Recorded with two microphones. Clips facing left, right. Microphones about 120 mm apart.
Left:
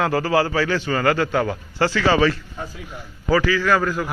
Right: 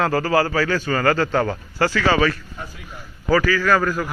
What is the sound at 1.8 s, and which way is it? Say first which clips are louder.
A man's voice: left 1 dB; 25° left (ahead or behind).